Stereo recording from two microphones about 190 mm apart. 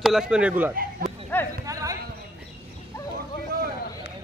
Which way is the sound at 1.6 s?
15° right (ahead or behind).